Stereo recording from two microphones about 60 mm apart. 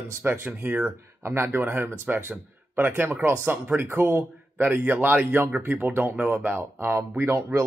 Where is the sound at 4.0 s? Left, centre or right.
Right.